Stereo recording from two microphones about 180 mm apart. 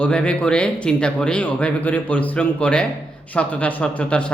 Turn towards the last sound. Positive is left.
turn(degrees=5)  # may be behind; listen again after turning